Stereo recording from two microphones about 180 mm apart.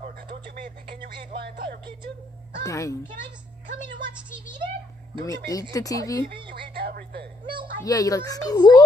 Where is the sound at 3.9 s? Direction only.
25° right (ahead or behind).